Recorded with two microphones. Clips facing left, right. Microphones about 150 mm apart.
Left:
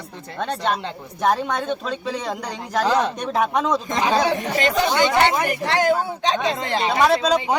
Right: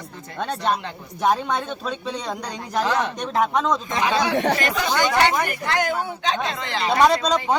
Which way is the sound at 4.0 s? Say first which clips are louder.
Even; 35° left (ahead or behind).